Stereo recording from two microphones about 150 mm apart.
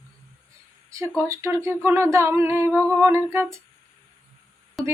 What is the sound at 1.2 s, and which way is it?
A woman's voice, 20° right (ahead or behind).